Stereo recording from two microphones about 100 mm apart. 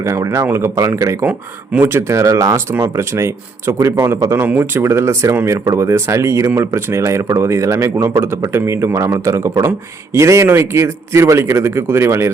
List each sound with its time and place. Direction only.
0.0 s speech: 30° right (ahead or behind)
1.2 s speech: 15° right (ahead or behind)